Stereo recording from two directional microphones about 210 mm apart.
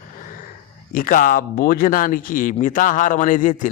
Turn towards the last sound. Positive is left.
turn(degrees=40)  # may be behind; listen again after turning